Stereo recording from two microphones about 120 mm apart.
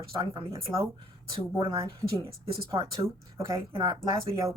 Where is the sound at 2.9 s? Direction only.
25° right (ahead or behind).